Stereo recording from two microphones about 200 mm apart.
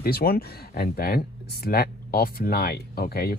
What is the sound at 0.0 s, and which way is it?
Speech, 50° left (ahead or behind).